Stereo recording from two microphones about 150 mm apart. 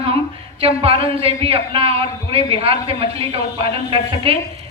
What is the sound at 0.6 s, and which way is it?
Speech, 40° right (ahead or behind).